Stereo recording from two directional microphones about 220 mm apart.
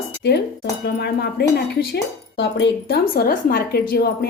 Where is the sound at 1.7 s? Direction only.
50° left (ahead or behind).